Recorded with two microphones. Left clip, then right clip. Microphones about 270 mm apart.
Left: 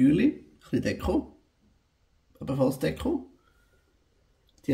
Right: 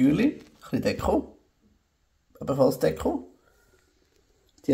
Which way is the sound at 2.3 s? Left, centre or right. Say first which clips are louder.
Right 5 dB; centre.